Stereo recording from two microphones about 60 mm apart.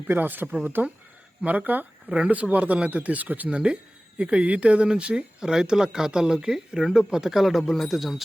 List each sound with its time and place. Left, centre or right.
0.1 s speech: right; by 8.2 s centre